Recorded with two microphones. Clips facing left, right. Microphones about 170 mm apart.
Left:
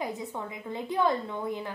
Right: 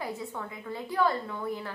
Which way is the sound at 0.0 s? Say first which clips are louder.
Left 2 dB; 20° left (ahead or behind).